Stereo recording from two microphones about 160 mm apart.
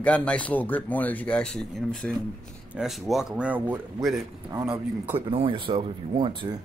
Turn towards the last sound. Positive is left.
turn(degrees=-30)  # may be behind; listen again after turning